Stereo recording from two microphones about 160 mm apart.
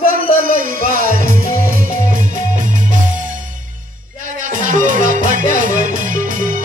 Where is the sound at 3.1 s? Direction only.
55° right (ahead or behind).